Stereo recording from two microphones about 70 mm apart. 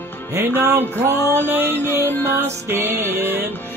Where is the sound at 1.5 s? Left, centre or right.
Right.